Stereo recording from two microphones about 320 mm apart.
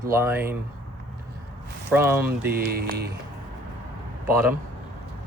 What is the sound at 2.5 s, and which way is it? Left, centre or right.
Speech, right.